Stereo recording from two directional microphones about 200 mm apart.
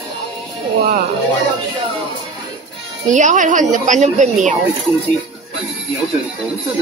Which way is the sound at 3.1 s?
40° right (ahead or behind).